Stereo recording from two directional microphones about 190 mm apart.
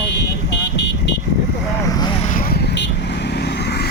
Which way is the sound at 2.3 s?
50° left (ahead or behind).